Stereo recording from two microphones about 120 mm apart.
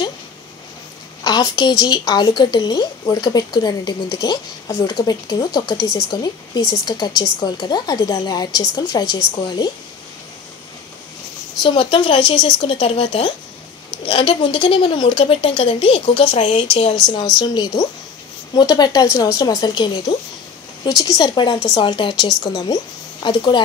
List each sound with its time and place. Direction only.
1.2 s a woman's voice: 35° left (ahead or behind)
11.6 s a woman's voice: 45° left (ahead or behind)
17.0 s speech: 5° left (ahead or behind)
17.4 s a woman's voice: 35° left (ahead or behind)
21.8 s a woman's voice: 40° left (ahead or behind)
22.4 s a woman's voice: 30° left (ahead or behind)